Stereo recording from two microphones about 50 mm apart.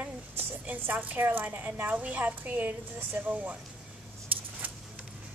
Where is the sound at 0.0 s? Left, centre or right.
Right.